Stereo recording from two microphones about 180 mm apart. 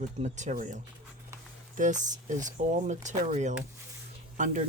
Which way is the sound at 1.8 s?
45° right (ahead or behind).